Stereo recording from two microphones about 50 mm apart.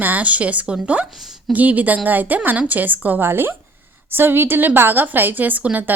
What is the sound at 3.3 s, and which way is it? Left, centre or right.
A woman's voice, right.